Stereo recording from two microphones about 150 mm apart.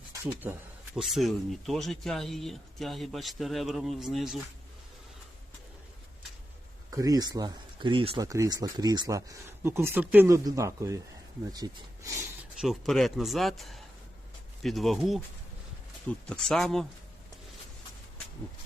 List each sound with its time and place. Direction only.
0.9 s speech: centre (ahead or behind)
6.9 s speech: 25° right (ahead or behind)
8.2 s speech: 25° right (ahead or behind)
12.4 s speech: centre (ahead or behind)